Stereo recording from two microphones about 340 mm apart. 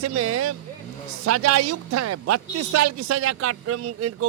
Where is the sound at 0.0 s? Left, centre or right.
Right.